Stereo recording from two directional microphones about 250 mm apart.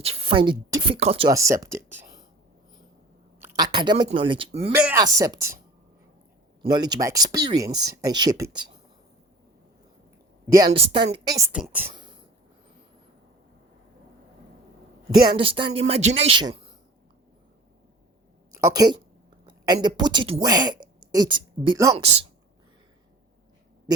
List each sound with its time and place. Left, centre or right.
0.0 s a woman's voice: right
3.4 s a woman's voice: centre
4.7 s speech: centre
6.6 s speech: centre
10.7 s a woman's voice: right
15.3 s a woman's voice: right
18.6 s speech: centre